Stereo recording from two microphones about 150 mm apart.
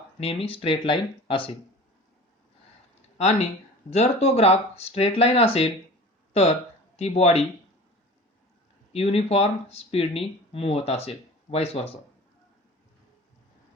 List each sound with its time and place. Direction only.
0.2 s speech: 40° left (ahead or behind)
3.2 s speech: 45° left (ahead or behind)
6.9 s speech: 45° left (ahead or behind)
8.9 s speech: 40° left (ahead or behind)